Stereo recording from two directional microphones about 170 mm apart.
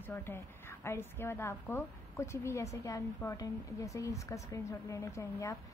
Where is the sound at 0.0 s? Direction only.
15° left (ahead or behind).